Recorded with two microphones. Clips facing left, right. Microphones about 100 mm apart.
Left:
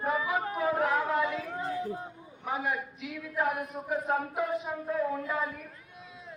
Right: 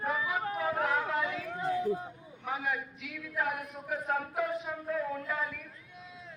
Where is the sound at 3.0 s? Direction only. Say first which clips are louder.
Left 4 dB; 25° left (ahead or behind).